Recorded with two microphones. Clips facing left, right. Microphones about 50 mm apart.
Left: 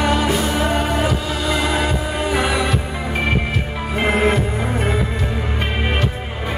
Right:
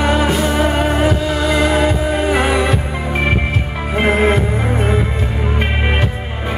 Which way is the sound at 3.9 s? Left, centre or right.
Right.